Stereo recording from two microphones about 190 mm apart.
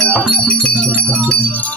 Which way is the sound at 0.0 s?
5° left (ahead or behind).